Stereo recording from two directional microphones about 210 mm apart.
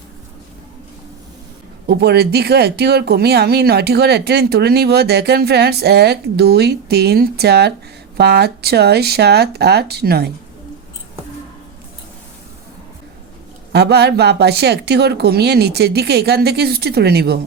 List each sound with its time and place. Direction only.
1.9 s speech: 50° right (ahead or behind)
13.7 s speech: 50° right (ahead or behind)